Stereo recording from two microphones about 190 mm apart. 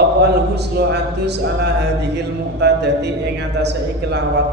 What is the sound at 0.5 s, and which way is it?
A man's voice, 60° right (ahead or behind).